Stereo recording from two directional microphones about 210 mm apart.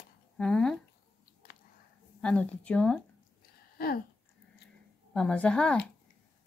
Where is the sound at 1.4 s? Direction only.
40° left (ahead or behind).